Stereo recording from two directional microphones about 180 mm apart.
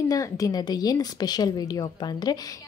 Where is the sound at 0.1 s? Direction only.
20° left (ahead or behind).